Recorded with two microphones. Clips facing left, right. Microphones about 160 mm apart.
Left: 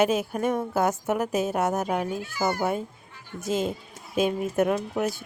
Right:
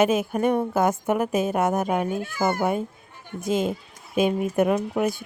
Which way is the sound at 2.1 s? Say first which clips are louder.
Right 3 dB; 55° right (ahead or behind).